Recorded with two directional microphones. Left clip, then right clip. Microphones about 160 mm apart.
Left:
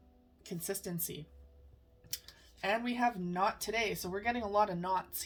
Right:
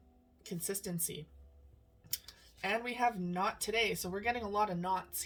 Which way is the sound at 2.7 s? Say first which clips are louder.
Left 1 dB; 40° left (ahead or behind).